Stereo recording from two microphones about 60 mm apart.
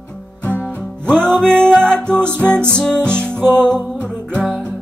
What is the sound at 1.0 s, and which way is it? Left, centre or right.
Music, centre.